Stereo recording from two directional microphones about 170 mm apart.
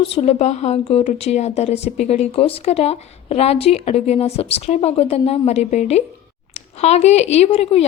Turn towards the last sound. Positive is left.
turn(degrees=35)  # may be behind; listen again after turning